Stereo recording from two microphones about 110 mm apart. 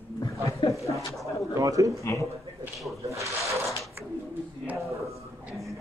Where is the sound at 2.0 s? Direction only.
25° left (ahead or behind).